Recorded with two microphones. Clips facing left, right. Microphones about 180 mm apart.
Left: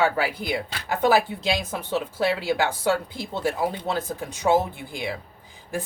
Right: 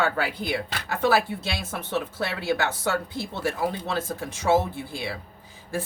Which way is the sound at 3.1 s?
20° left (ahead or behind).